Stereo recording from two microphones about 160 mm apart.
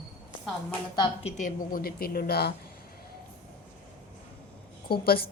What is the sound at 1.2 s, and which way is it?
A woman's voice, 55° left (ahead or behind).